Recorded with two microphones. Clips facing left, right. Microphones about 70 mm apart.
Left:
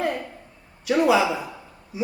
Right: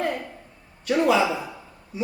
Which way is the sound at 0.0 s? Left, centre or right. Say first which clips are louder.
Left 1 dB; centre.